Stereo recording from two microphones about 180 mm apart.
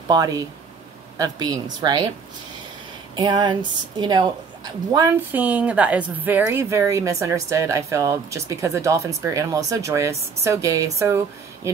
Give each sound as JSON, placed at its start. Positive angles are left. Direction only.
{"t": 0.1, "sound": "speech", "side_deg": -20}
{"t": 3.2, "sound": "a woman's voice", "side_deg": -25}